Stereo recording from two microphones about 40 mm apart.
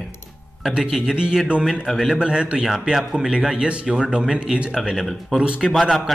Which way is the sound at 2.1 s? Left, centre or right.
Right.